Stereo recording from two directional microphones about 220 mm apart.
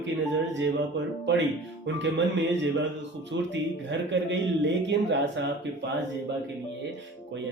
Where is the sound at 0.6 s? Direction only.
55° right (ahead or behind).